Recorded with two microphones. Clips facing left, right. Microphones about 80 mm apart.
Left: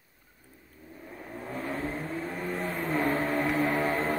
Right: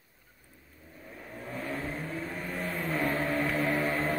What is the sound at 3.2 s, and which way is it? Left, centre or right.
Music, centre.